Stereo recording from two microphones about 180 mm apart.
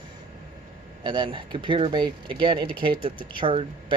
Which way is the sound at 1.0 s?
25° right (ahead or behind).